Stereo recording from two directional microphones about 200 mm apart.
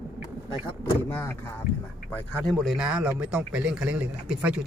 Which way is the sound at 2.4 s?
Centre (ahead or behind).